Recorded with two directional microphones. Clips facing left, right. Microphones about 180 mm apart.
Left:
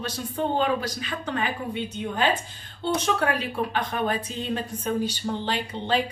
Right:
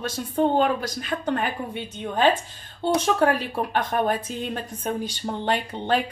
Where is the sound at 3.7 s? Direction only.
50° right (ahead or behind).